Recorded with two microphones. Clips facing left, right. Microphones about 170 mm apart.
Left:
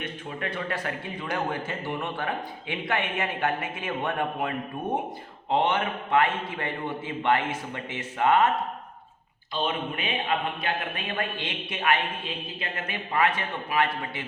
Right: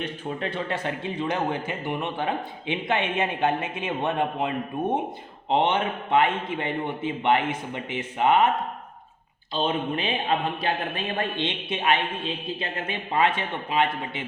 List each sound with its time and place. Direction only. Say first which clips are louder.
0.0 s a man's voice: right 4 dB; 30° right (ahead or behind)
9.6 s a man's voice: right 5 dB; 30° right (ahead or behind)